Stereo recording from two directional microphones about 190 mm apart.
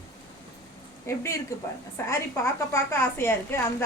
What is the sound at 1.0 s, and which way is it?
A woman's voice, 15° left (ahead or behind).